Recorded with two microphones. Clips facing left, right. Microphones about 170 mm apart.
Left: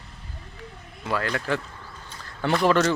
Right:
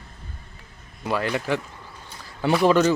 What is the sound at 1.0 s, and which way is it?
A man's voice, 15° right (ahead or behind).